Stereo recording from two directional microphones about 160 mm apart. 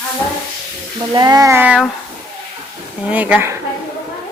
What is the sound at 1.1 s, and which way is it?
Speech, 25° right (ahead or behind).